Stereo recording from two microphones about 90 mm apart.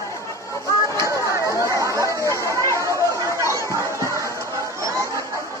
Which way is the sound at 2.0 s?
35° left (ahead or behind).